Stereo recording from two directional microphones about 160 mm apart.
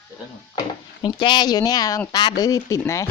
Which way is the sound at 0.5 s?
25° left (ahead or behind).